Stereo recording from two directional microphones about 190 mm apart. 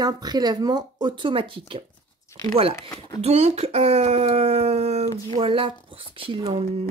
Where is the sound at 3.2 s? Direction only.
35° right (ahead or behind).